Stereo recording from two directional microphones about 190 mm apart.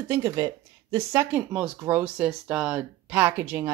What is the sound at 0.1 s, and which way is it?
Speech, 15° right (ahead or behind).